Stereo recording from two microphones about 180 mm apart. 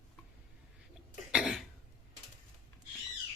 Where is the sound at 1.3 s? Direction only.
5° right (ahead or behind).